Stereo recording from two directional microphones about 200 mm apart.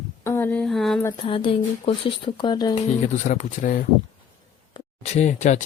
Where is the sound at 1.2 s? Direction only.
25° left (ahead or behind).